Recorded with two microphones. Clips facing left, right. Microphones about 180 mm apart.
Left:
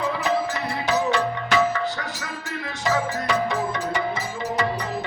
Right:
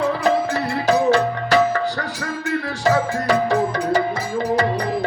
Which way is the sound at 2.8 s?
35° right (ahead or behind).